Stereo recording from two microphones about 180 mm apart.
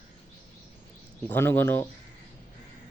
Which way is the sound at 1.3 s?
10° left (ahead or behind).